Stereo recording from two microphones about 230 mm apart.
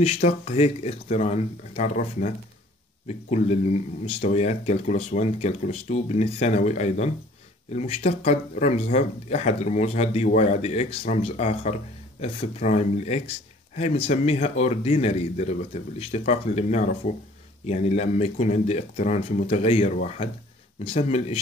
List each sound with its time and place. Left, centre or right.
0.0 s speech: left